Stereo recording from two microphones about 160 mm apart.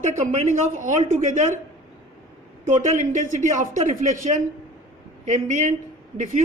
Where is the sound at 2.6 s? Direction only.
50° right (ahead or behind).